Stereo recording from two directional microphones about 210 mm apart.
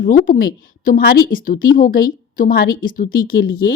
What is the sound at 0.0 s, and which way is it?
A woman's voice, 40° left (ahead or behind).